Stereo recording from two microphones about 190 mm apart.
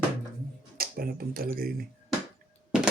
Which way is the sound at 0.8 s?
50° right (ahead or behind).